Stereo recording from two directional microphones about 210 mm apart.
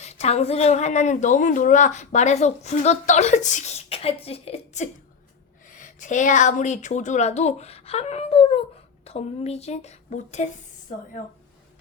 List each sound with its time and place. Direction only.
0.0 s a woman's voice: 30° left (ahead or behind)